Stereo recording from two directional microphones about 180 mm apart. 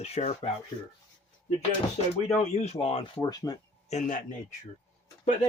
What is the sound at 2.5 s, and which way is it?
Speech, 35° left (ahead or behind).